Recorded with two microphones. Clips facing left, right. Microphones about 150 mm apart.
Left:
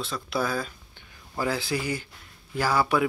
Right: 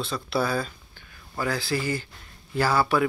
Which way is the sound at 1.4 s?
20° left (ahead or behind).